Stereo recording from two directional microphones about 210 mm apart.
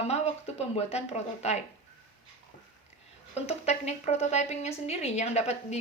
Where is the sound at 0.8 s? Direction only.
30° left (ahead or behind).